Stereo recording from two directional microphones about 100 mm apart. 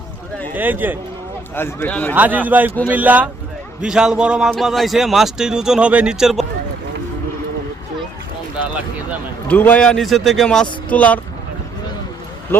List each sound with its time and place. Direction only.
0.5 s a man's voice: 20° right (ahead or behind)
1.5 s a man's voice: 25° left (ahead or behind)
2.1 s a man's voice: 15° right (ahead or behind)
9.5 s speech: 15° left (ahead or behind)
12.5 s speech: 25° left (ahead or behind)